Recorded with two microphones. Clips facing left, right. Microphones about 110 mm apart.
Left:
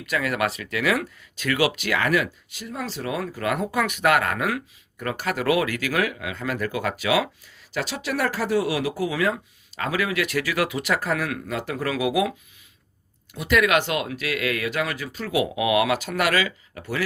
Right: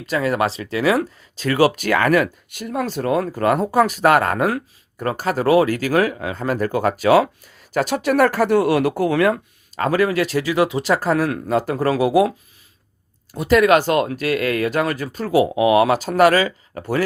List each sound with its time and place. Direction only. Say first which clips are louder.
0.0 s speech: right 5 dB; 30° right (ahead or behind); by 9.8 s 55° right (ahead or behind)
9.8 s speech: right 7 dB; 40° right (ahead or behind)
13.3 s speech: right 6 dB; 40° right (ahead or behind)